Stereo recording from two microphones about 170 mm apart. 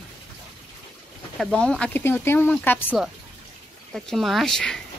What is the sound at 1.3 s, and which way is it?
Speech, centre (ahead or behind).